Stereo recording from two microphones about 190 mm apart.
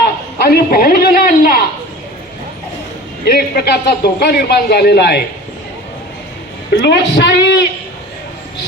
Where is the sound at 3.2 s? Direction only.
55° left (ahead or behind).